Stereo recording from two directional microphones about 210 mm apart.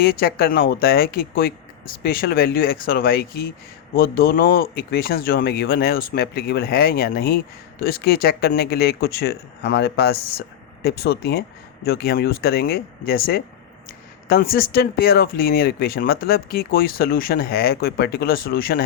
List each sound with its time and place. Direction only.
0.0 s speech: 45° left (ahead or behind)